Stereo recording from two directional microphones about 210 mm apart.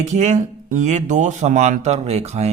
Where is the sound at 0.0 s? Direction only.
35° right (ahead or behind).